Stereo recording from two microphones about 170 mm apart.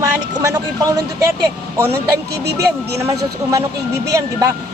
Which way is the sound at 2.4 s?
75° right (ahead or behind).